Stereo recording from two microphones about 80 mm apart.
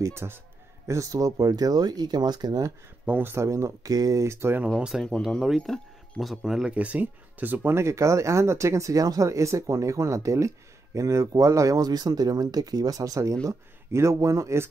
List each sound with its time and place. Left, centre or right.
0.0 s speech: right
0.8 s speech: right
3.1 s speech: right
3.9 s speech: right
4.9 s speech: centre; by 14.7 s right